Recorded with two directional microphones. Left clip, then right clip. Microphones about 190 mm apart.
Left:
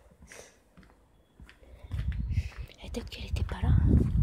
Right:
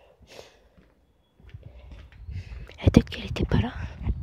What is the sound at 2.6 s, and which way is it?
Whispering, 45° right (ahead or behind).